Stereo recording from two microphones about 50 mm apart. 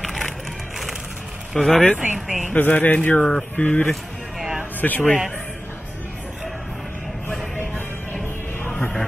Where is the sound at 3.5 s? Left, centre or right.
Left.